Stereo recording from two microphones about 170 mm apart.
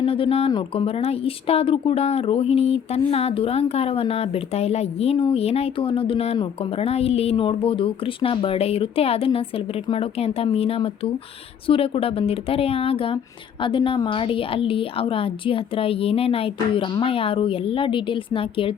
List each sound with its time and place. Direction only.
0.0 s speech: 35° left (ahead or behind)